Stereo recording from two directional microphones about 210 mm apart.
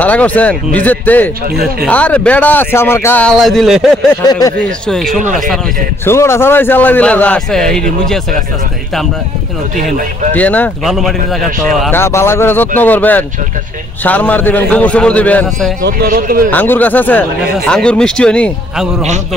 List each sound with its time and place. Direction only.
0.0 s speech: 5° left (ahead or behind)
4.3 s speech: 15° left (ahead or behind)
5.0 s speech: 40° right (ahead or behind)
6.0 s speech: 10° left (ahead or behind)
10.3 s a man's voice: 5° left (ahead or behind)
11.9 s speech: 10° left (ahead or behind)
15.8 s speech: 45° right (ahead or behind)
16.4 s a man's voice: 10° left (ahead or behind)